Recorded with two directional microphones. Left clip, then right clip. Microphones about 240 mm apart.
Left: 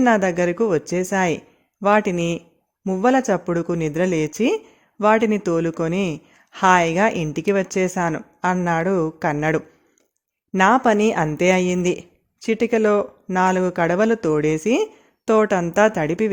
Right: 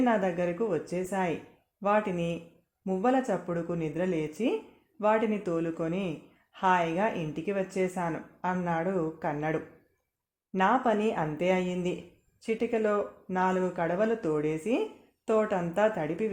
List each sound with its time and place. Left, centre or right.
0.0 s speech: left